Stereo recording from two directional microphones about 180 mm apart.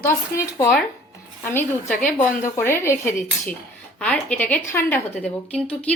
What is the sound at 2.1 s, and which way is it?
Speech, 15° left (ahead or behind).